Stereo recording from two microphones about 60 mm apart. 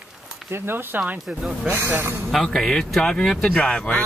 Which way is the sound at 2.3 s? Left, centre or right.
Centre.